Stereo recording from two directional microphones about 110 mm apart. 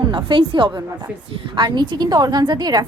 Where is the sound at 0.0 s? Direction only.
45° right (ahead or behind).